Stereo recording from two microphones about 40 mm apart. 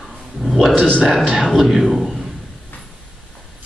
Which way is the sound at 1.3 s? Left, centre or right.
Centre.